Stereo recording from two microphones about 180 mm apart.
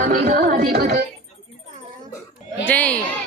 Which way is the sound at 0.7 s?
60° right (ahead or behind).